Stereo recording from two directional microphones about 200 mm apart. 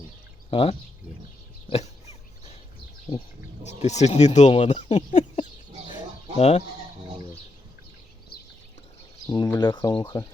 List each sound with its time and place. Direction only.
0.5 s speech: 30° left (ahead or behind)
1.7 s dog: 35° left (ahead or behind)
3.8 s speech: 35° left (ahead or behind)
4.9 s a sound: 25° left (ahead or behind)
8.3 s a sound: 50° left (ahead or behind)
9.2 s speech: 20° left (ahead or behind)